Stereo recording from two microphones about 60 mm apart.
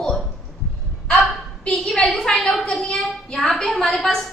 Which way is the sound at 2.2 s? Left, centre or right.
Centre.